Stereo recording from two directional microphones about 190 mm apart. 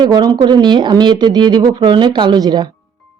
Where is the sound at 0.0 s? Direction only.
20° right (ahead or behind).